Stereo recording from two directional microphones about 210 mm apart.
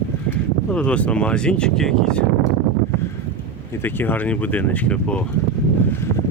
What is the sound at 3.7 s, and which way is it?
Speech, 10° left (ahead or behind).